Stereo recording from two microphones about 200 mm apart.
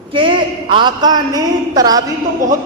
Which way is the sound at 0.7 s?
20° right (ahead or behind).